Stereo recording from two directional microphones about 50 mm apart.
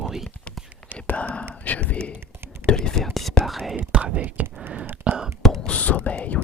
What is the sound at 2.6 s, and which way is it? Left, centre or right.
Whispering, centre.